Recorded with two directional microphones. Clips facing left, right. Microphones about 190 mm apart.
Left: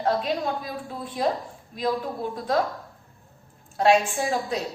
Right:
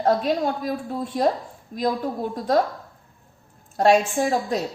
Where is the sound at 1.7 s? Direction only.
45° right (ahead or behind).